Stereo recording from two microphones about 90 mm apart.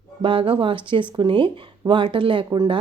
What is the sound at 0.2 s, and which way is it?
Speech, 75° right (ahead or behind).